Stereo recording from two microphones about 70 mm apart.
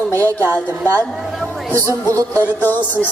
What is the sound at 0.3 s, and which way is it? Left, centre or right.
Speech, right.